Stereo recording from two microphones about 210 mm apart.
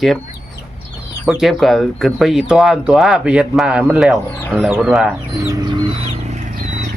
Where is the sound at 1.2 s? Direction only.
Centre (ahead or behind).